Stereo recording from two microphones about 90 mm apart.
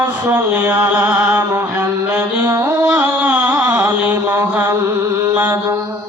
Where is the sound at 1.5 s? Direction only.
35° right (ahead or behind).